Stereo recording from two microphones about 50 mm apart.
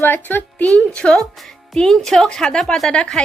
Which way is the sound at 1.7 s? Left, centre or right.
Centre.